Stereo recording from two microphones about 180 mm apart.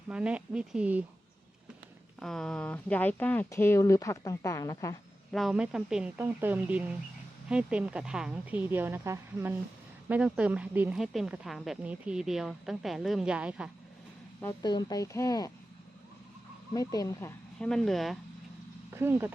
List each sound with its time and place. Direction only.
0.1 s a woman's voice: 5° right (ahead or behind)
2.1 s speech: 5° left (ahead or behind); by 4.9 s 20° left (ahead or behind)
5.3 s a woman's voice: centre (ahead or behind)
14.6 s speech: 25° left (ahead or behind)
16.7 s speech: 20° left (ahead or behind)
17.6 s speech: 5° left (ahead or behind)
18.9 s a woman's voice: 15° right (ahead or behind)